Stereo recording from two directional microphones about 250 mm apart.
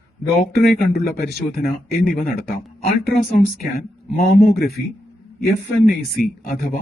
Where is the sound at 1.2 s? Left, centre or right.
Left.